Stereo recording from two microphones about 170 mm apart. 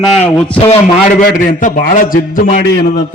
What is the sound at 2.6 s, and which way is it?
Speech, 75° left (ahead or behind).